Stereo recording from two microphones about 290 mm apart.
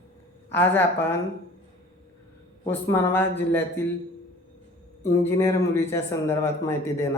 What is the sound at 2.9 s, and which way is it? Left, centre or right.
Speech, centre.